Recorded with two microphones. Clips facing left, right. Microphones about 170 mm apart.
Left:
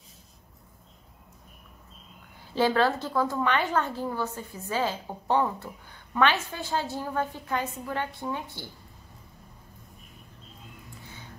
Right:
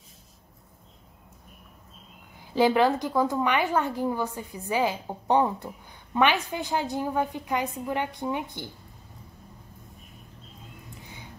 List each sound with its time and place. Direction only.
2.5 s a woman's voice: 15° right (ahead or behind)